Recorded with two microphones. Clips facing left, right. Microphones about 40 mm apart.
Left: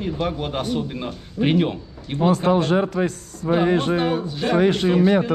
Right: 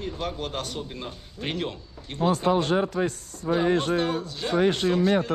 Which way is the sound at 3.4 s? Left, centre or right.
Left.